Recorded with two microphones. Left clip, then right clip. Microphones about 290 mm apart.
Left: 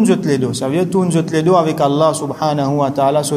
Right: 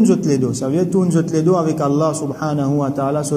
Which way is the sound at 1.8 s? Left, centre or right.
Left.